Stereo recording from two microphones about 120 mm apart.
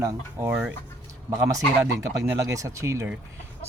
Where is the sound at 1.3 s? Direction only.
25° right (ahead or behind).